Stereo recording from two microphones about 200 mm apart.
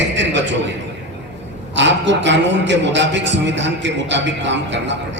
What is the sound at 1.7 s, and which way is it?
A man's voice, 65° right (ahead or behind).